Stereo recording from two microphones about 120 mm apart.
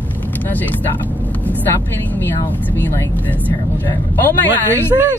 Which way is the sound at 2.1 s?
15° left (ahead or behind).